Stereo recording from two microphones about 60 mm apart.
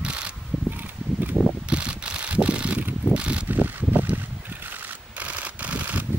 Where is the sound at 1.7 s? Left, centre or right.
Centre.